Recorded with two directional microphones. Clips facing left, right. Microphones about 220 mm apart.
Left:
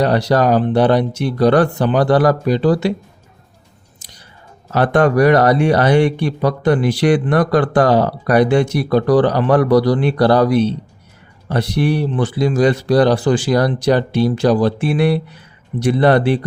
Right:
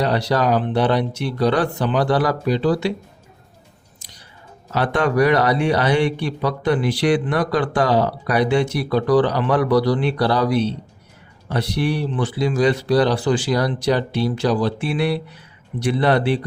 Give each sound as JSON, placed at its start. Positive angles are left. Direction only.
{"t": 0.0, "sound": "speech", "side_deg": 45}
{"t": 4.7, "sound": "speech", "side_deg": 50}